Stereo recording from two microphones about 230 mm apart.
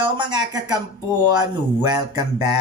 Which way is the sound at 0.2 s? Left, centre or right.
Centre.